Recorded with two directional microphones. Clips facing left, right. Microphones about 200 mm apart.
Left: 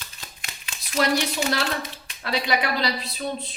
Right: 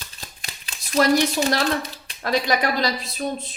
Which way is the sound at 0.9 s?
40° right (ahead or behind).